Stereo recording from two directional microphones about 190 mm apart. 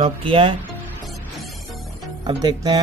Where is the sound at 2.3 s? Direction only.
20° right (ahead or behind).